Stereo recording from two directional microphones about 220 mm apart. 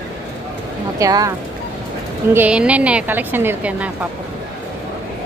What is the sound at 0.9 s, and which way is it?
Speech, 15° right (ahead or behind).